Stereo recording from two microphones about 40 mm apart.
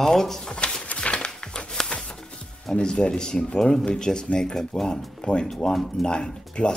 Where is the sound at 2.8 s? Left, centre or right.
Left.